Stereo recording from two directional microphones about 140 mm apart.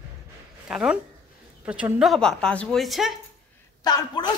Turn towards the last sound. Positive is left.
turn(degrees=30)  # may be behind; listen again after turning